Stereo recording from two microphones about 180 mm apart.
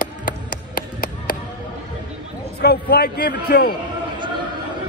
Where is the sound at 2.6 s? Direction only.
60° left (ahead or behind).